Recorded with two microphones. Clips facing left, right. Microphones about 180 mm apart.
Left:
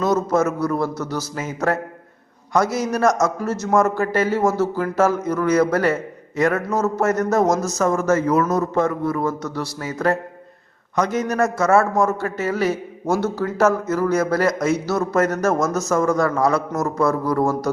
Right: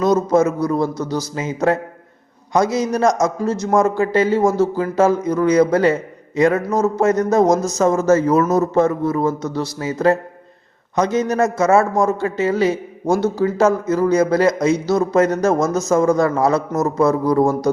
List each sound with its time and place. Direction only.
0.0 s speech: 15° right (ahead or behind)
2.9 s a man's voice: 15° right (ahead or behind)